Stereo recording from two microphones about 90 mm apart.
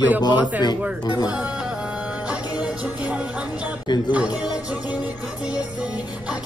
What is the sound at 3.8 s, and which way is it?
Speech, 55° left (ahead or behind).